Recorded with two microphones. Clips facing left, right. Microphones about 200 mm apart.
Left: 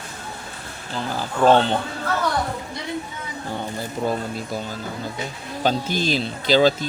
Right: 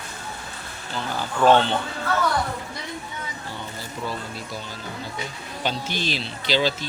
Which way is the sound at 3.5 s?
50° left (ahead or behind).